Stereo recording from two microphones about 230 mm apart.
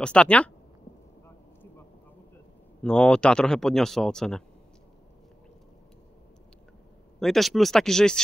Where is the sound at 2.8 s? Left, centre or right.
Centre.